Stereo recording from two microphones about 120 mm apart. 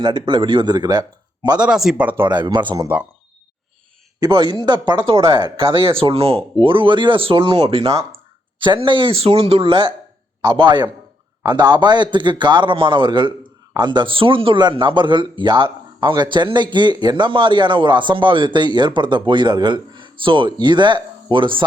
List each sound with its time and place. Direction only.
0.0 s speech: 40° right (ahead or behind)
1.6 s speech: 5° right (ahead or behind)
2.2 s speech: 40° right (ahead or behind)
4.2 s speech: 40° right (ahead or behind)
7.9 s speech: 25° right (ahead or behind)
8.5 s speech: 40° right (ahead or behind)